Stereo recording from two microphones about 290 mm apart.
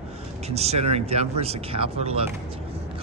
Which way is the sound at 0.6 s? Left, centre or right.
Right.